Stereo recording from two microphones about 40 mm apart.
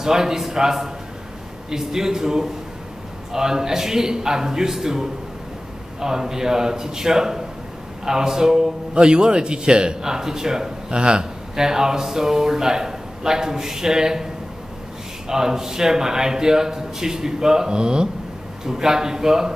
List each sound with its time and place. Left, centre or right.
0.0 s a man's voice: centre